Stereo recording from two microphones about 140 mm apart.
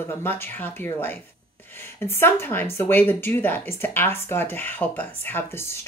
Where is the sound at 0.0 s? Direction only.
15° left (ahead or behind).